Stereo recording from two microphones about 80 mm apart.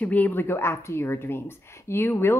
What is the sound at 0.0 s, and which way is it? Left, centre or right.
A woman's voice, left.